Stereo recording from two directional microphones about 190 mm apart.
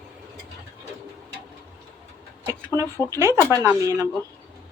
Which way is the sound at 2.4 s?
20° right (ahead or behind).